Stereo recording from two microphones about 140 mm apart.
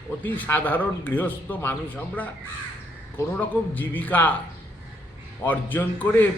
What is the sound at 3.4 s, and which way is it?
Speech, 15° left (ahead or behind).